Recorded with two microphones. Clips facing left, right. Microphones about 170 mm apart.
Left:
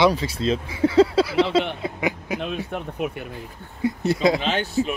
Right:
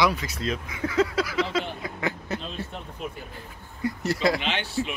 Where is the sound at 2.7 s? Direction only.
65° left (ahead or behind).